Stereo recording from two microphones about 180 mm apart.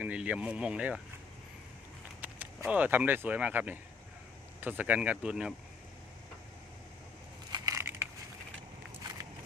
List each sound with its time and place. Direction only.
0.0 s speech: 5° right (ahead or behind)
2.2 s speech: 10° right (ahead or behind)
7.5 s crushing: 20° right (ahead or behind)